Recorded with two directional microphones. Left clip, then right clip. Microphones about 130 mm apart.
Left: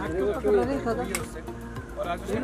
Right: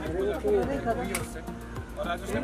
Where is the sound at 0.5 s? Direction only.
40° left (ahead or behind).